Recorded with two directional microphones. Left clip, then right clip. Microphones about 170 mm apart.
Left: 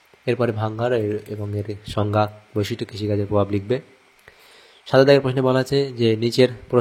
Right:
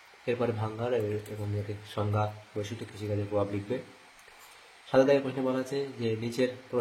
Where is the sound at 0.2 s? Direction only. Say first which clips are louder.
Left 8 dB; 50° left (ahead or behind).